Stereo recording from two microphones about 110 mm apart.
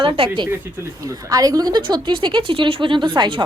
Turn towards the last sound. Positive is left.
turn(degrees=-45)  # may be behind; listen again after turning